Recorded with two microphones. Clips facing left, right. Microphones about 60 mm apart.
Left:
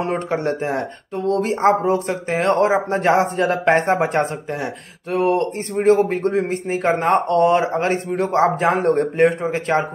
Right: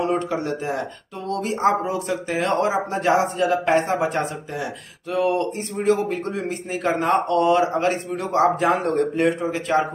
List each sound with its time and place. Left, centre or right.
0.0 s speech: left